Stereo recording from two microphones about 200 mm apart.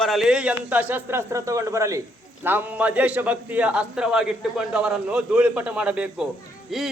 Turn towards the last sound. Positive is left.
turn(degrees=0)  # may be behind; listen again after turning